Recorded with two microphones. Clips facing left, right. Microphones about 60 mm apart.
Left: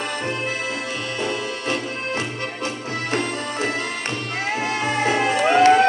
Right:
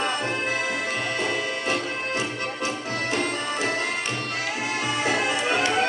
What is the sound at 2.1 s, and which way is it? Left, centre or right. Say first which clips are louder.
Music: left 1 dB; left.